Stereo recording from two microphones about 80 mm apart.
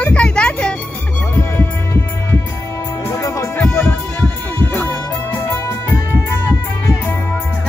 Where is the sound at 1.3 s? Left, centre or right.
Left.